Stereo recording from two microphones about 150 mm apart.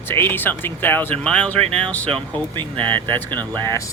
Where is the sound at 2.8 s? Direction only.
30° right (ahead or behind).